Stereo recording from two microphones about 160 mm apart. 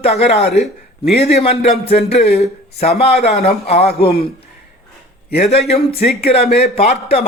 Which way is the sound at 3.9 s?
75° left (ahead or behind).